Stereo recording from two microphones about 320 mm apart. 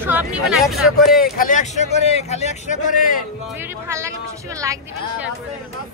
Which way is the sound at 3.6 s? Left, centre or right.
Centre.